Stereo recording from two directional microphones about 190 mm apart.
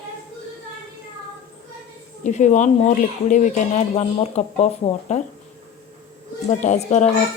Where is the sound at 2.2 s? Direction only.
40° left (ahead or behind).